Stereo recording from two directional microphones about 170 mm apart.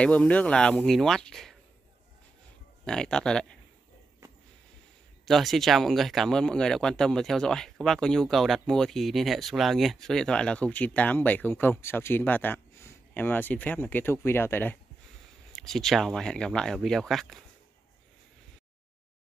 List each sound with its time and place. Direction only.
0.0 s speech: 5° left (ahead or behind)
2.8 s speech: 5° left (ahead or behind)
5.2 s speech: centre (ahead or behind)